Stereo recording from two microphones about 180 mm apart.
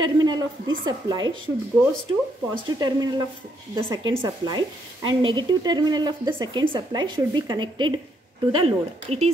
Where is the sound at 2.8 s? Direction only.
20° right (ahead or behind).